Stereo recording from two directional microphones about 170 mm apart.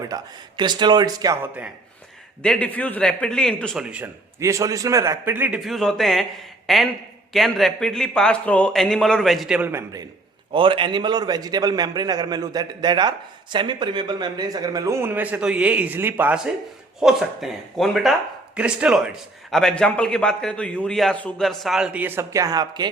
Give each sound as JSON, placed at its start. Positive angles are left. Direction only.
{"t": 0.0, "sound": "a man's voice", "side_deg": -25}
{"t": 2.4, "sound": "a man's voice", "side_deg": 5}
{"t": 3.8, "sound": "a man's voice", "side_deg": -10}
{"t": 10.5, "sound": "a man's voice", "side_deg": -30}